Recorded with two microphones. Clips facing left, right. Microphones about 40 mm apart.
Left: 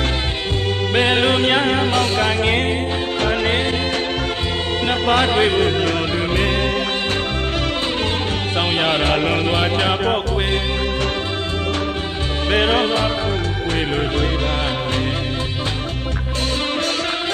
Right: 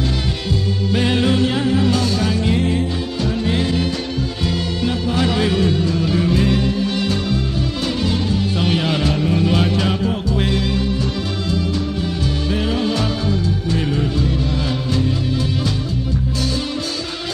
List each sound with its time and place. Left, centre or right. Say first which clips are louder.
0.9 s music: left 1 dB; left
4.8 s music: left 3 dB; left
5.3 s music: left 2 dB; left
8.6 s mantra: left 2 dB; left
9.5 s music: even; left
12.4 s music: left 5 dB; left